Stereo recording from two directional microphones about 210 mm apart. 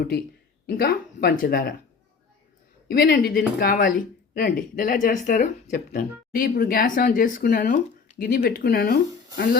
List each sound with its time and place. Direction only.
0.7 s speech: 45° left (ahead or behind)
2.9 s speech: 45° left (ahead or behind)